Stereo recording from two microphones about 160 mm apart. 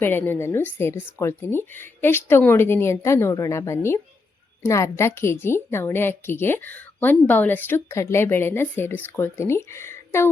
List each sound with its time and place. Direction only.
0.0 s a woman's voice: 15° left (ahead or behind)